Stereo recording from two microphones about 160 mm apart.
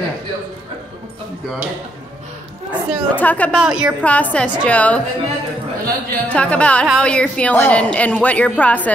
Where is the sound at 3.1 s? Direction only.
10° left (ahead or behind).